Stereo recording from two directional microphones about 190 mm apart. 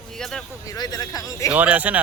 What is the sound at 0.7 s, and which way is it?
Speech, 20° left (ahead or behind).